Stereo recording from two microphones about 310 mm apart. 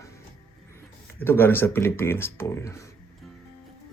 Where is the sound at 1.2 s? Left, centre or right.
Centre.